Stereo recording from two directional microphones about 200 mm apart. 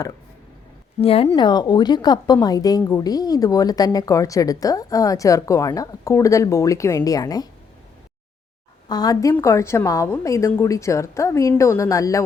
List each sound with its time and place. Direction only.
1.0 s a woman's voice: 30° left (ahead or behind)
8.9 s a woman's voice: 20° left (ahead or behind)